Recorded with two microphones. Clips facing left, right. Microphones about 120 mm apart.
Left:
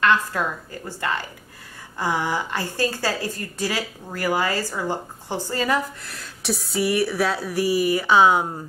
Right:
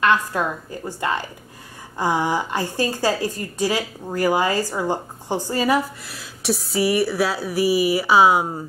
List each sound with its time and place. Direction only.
0.0 s a woman's voice: 15° right (ahead or behind)